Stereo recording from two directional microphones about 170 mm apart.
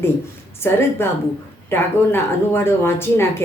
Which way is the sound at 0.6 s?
15° left (ahead or behind).